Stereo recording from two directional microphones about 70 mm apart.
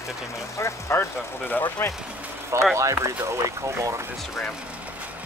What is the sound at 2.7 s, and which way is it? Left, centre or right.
Speech, right.